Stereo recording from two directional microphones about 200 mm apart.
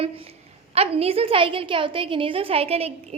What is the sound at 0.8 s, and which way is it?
A child's voice, 30° right (ahead or behind).